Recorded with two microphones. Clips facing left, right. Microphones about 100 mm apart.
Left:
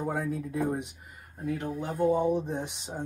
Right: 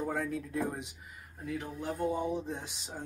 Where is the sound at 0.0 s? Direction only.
10° left (ahead or behind).